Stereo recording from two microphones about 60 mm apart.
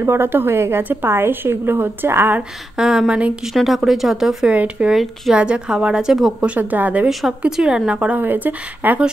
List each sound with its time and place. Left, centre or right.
0.0 s a woman's voice: right
2.8 s a woman's voice: centre
3.5 s speech: centre
4.5 s a woman's voice: centre
7.1 s a woman's voice: centre; by 8.2 s right
8.2 s a woman's voice: right